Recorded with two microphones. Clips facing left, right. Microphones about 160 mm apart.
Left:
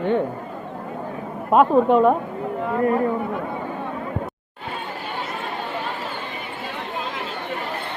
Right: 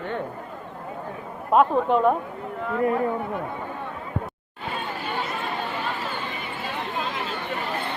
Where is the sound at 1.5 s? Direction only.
Centre (ahead or behind).